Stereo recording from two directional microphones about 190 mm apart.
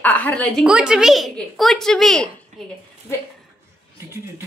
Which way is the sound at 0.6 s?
5° right (ahead or behind).